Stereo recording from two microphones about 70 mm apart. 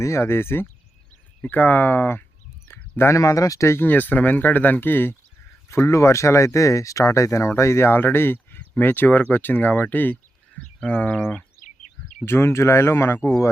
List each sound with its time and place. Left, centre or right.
0.0 s speech: left
3.0 s speech: left
3.8 s speech: left
5.6 s speech: left
12.2 s speech: left
13.1 s speech: left